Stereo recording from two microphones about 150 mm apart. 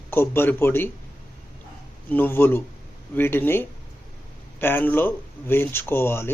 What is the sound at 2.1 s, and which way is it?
Speech, 15° left (ahead or behind).